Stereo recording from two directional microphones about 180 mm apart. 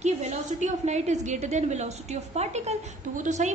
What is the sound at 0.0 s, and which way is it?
A woman's voice, 40° right (ahead or behind).